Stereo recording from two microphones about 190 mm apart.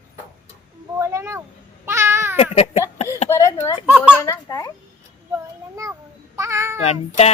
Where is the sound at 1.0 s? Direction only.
15° right (ahead or behind).